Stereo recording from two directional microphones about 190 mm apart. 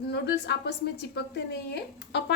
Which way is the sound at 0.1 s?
60° left (ahead or behind).